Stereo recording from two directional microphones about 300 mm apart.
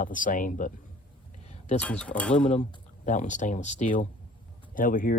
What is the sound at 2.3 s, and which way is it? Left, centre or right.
Speech, left.